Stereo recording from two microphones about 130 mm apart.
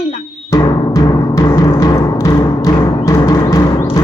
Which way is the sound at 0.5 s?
25° left (ahead or behind).